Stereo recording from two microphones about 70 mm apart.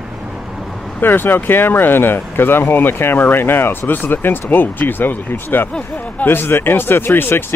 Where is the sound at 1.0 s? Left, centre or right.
Left.